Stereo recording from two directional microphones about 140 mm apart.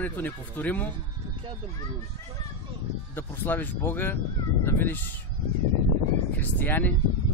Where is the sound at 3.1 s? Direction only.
15° left (ahead or behind).